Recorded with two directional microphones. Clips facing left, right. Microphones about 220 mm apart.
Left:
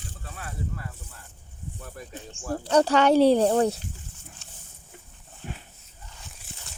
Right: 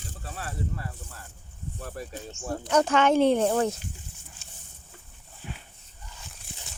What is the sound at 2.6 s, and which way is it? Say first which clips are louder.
Speech: left 2 dB; 35° left (ahead or behind).